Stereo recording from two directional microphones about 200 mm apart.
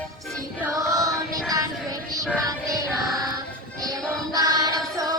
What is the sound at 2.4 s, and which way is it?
Music, 15° right (ahead or behind).